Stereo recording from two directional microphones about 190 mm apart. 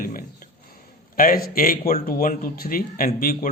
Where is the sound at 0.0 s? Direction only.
50° left (ahead or behind).